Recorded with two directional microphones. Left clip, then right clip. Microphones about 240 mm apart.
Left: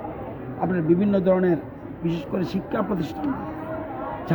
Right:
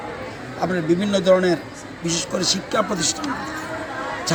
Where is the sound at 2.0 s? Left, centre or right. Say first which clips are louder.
Right 5 dB; left.